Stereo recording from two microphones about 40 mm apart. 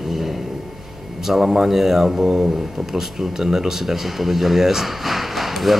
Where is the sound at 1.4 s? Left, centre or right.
Centre.